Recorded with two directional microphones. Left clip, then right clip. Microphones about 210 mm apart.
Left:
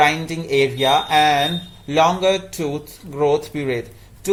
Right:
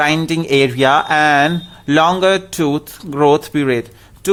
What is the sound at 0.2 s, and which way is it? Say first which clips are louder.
Speech: right 5 dB; 45° right (ahead or behind).